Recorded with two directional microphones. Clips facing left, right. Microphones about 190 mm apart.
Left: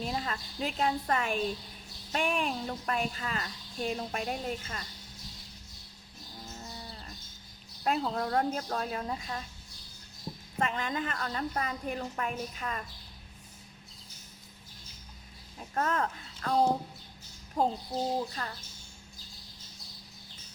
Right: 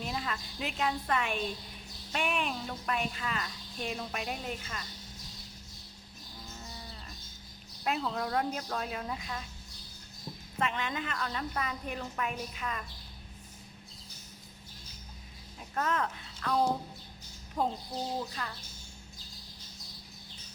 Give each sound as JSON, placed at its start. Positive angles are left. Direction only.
{"t": 0.0, "sound": "a woman's voice", "side_deg": 35}
{"t": 7.9, "sound": "a woman's voice", "side_deg": 40}
{"t": 10.6, "sound": "a woman's voice", "side_deg": 40}
{"t": 15.7, "sound": "speech", "side_deg": 40}
{"t": 17.6, "sound": "a woman's voice", "side_deg": 40}